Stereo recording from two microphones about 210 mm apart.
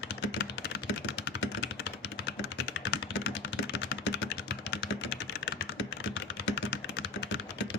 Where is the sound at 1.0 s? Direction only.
55° left (ahead or behind).